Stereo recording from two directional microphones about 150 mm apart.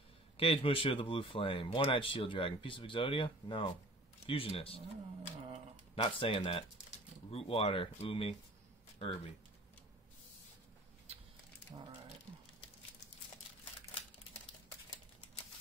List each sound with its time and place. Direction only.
0.4 s speech: 35° left (ahead or behind)
6.0 s speech: 35° left (ahead or behind)